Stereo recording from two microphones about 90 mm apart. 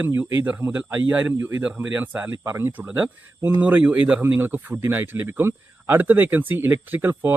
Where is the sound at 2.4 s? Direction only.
30° right (ahead or behind).